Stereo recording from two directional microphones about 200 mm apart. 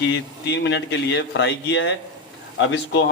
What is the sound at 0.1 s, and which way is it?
Speech, 60° left (ahead or behind).